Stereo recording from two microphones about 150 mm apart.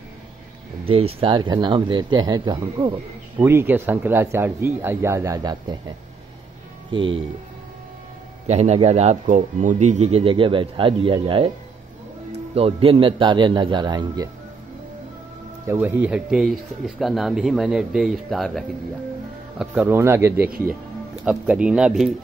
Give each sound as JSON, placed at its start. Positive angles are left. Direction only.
{"t": 0.8, "sound": "speech", "side_deg": -40}
{"t": 3.3, "sound": "speech", "side_deg": -15}
{"t": 6.9, "sound": "speech", "side_deg": -35}
{"t": 8.5, "sound": "speech", "side_deg": -45}
{"t": 12.5, "sound": "speech", "side_deg": -40}
{"t": 15.6, "sound": "speech", "side_deg": -15}